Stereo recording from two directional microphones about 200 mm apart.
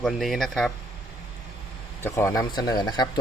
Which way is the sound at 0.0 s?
Centre (ahead or behind).